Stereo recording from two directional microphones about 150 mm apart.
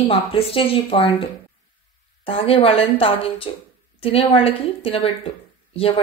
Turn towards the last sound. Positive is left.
turn(degrees=40)  # may be behind; listen again after turning